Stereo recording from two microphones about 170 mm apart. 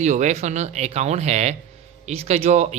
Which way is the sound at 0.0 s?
45° right (ahead or behind).